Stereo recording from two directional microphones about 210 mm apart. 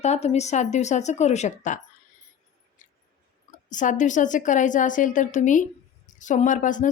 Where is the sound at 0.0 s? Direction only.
30° left (ahead or behind).